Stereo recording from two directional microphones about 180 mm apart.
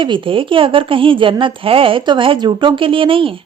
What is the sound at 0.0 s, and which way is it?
Speech, 25° right (ahead or behind).